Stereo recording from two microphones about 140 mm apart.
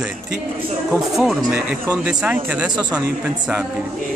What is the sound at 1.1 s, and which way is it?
Speech, 5° right (ahead or behind).